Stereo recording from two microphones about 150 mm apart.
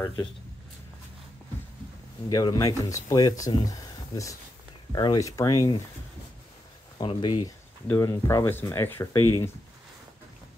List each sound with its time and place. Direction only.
2.2 s speech: 25° left (ahead or behind)
4.9 s speech: 25° left (ahead or behind)
7.0 s speech: 35° left (ahead or behind)
7.9 s speech: 20° left (ahead or behind)